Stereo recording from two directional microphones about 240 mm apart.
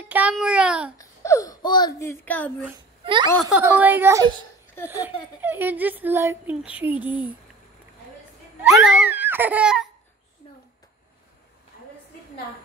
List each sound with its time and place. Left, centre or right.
0.0 s a child's voice: centre
0.9 s speech: centre
3.0 s a sound: centre
3.5 s speech: centre
8.6 s giggle: centre